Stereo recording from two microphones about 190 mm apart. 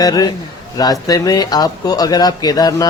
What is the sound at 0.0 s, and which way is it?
Speech, 20° left (ahead or behind).